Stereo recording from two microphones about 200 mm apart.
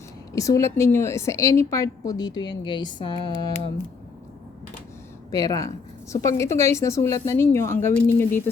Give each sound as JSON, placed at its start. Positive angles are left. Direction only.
{"t": 0.3, "sound": "a woman's voice", "side_deg": 15}
{"t": 5.3, "sound": "a woman's voice", "side_deg": 20}